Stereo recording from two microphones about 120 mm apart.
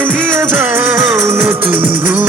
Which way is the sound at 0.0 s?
15° right (ahead or behind).